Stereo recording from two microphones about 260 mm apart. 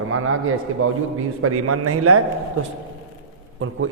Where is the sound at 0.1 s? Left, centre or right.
Right.